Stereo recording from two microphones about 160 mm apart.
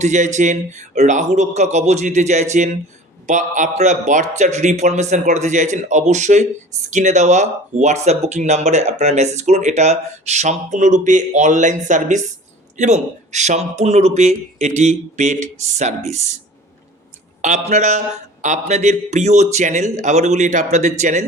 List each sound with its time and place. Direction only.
0.0 s speech: 50° right (ahead or behind)
17.4 s speech: 50° right (ahead or behind)